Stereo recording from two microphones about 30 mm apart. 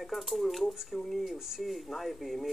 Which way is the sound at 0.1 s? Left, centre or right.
Centre.